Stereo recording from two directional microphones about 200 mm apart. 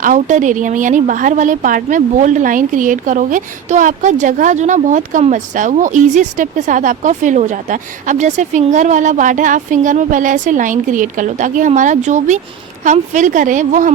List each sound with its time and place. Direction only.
0.0 s speech: 40° right (ahead or behind)